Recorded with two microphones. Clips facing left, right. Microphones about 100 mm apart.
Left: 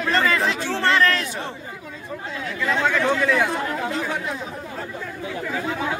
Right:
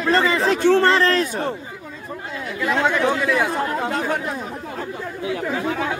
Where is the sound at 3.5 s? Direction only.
45° right (ahead or behind).